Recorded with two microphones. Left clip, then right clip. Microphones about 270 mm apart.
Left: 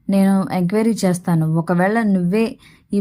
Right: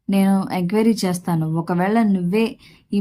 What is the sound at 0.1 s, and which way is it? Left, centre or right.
Speech, centre.